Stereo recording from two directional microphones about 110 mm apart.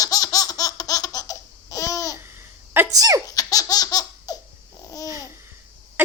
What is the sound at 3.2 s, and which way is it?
Laughter, 35° left (ahead or behind).